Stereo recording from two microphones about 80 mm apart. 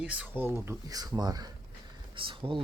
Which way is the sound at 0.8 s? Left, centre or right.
Right.